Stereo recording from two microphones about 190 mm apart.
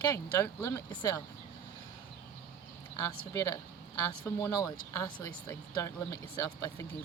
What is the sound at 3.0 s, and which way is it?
Speech, 15° left (ahead or behind).